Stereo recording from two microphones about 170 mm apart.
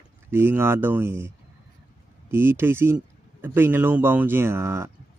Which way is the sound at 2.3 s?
15° right (ahead or behind).